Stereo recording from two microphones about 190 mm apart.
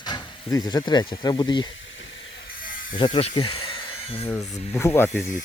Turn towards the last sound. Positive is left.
turn(degrees=10)  # may be behind; listen again after turning